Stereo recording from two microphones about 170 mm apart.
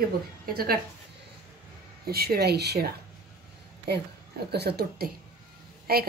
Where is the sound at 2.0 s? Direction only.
65° right (ahead or behind).